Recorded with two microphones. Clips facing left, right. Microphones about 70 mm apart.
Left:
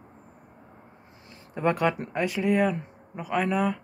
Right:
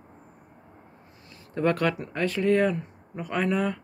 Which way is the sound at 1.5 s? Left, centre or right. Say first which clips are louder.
Even; centre.